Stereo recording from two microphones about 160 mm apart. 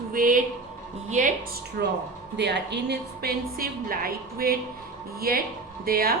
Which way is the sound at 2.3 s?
90° right.